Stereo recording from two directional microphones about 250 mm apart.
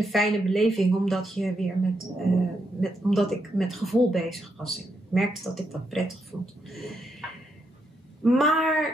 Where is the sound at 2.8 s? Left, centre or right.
Centre.